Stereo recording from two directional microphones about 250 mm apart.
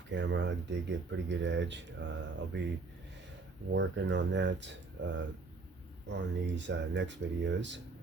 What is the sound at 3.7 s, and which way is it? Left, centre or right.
Speech, right.